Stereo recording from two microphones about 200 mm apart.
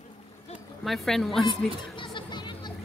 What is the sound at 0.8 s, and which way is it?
Speech, centre (ahead or behind).